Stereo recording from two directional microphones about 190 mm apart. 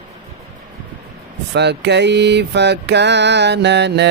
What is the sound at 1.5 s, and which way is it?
Mantra, 65° right (ahead or behind).